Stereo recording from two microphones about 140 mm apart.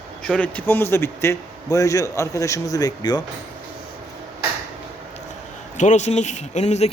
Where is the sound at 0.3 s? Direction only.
10° left (ahead or behind); by 3.2 s 30° left (ahead or behind).